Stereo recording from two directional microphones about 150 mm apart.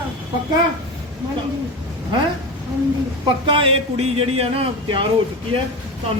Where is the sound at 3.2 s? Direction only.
35° right (ahead or behind).